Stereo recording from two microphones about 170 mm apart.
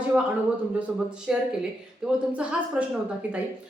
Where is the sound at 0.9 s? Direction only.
5° right (ahead or behind).